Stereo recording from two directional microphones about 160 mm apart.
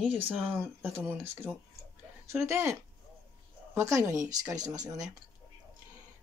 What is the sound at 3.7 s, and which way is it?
Speech, 20° right (ahead or behind).